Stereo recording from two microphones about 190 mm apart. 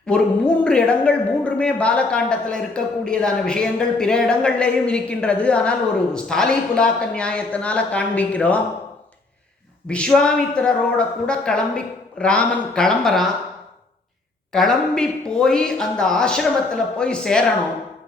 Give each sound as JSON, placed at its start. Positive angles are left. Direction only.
{"t": 0.1, "sound": "a woman's voice", "side_deg": 5}
{"t": 9.9, "sound": "a woman's voice", "side_deg": 5}
{"t": 14.5, "sound": "a woman's voice", "side_deg": 0}